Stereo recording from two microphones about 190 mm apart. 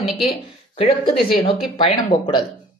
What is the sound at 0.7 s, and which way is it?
Speech, 30° left (ahead or behind).